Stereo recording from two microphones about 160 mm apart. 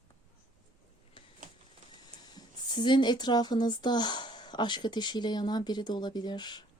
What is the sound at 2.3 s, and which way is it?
Speech, 30° left (ahead or behind).